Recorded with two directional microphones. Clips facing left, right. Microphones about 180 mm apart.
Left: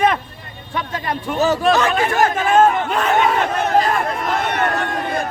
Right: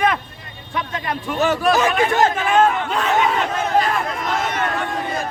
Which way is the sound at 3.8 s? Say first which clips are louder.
Left 2 dB; 45° left (ahead or behind).